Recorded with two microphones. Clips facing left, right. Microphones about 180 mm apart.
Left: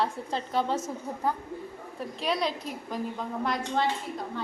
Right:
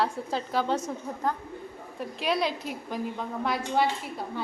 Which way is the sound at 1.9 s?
Centre (ahead or behind).